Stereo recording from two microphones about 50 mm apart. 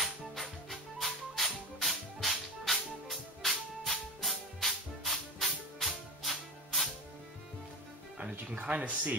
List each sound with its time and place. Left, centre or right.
0.0 s music: centre
8.2 s speech: right